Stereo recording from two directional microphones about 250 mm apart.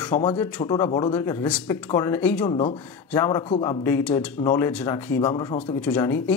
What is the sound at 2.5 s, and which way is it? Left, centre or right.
Speech, left.